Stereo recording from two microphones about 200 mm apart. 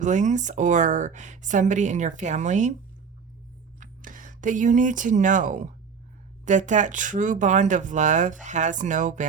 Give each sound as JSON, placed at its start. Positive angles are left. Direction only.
{"t": 0.0, "sound": "speech", "side_deg": -35}
{"t": 3.8, "sound": "speech", "side_deg": -40}